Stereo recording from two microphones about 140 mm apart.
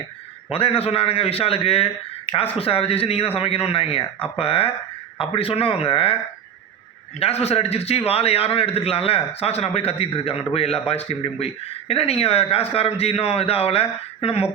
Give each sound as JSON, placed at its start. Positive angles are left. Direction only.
{"t": 0.5, "sound": "a man's voice", "side_deg": 45}
{"t": 7.2, "sound": "a man's voice", "side_deg": 45}